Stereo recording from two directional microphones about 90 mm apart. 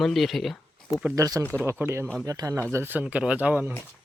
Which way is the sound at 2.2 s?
40° right (ahead or behind).